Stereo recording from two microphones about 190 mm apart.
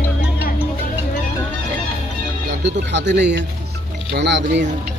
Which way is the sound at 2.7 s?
65° right (ahead or behind).